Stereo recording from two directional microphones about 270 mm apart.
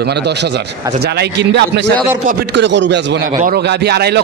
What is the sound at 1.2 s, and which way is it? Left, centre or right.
A man's voice, right.